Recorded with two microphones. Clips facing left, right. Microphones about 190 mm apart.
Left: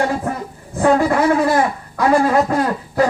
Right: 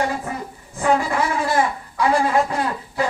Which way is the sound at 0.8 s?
50° left (ahead or behind).